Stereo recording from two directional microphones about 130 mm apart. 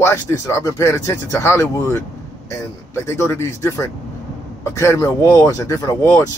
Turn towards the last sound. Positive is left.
turn(degrees=25)  # may be behind; listen again after turning